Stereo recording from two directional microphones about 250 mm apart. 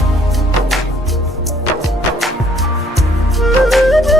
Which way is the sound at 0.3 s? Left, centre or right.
Centre.